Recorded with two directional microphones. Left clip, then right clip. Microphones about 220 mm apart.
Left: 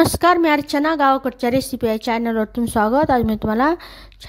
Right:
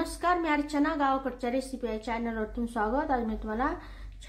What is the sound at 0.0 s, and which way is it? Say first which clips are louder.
A woman's voice: left 14 dB; 45° left (ahead or behind).